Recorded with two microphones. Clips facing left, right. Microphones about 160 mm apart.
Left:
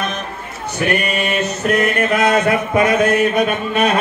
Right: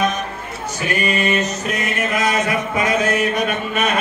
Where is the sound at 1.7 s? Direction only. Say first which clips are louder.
Left 6 dB; 60° left (ahead or behind).